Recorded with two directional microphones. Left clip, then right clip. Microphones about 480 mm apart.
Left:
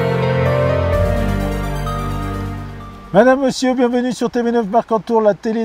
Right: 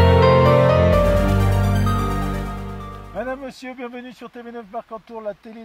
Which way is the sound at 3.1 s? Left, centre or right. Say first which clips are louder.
Left 17 dB; left.